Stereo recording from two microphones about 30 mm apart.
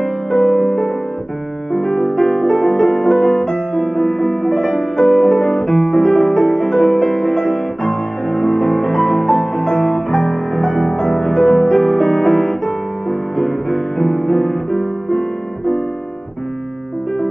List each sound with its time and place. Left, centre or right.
0.0 s music: centre
1.7 s piano: centre
2.5 s music: centre
3.4 s music: left
3.8 s music: centre
11.2 s music: centre